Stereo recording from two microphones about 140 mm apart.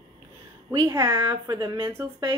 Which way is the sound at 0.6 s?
20° right (ahead or behind).